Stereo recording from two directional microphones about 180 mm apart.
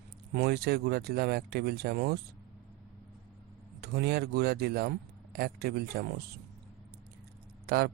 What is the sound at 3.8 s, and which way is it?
Speech, 60° right (ahead or behind).